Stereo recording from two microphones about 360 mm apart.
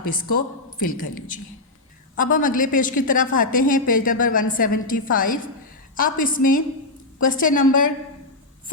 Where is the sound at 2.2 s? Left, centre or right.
Left.